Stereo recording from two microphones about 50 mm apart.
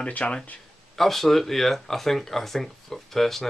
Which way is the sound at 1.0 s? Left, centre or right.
Centre.